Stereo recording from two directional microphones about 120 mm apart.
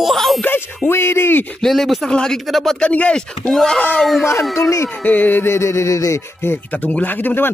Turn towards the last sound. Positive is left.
turn(degrees=15)  # may be behind; listen again after turning